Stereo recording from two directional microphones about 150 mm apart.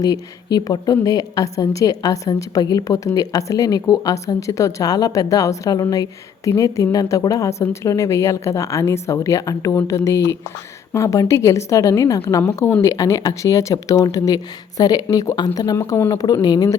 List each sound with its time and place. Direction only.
0.0 s a woman's voice: 25° left (ahead or behind)